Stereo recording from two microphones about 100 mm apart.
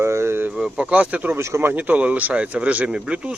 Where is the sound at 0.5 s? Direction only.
10° right (ahead or behind).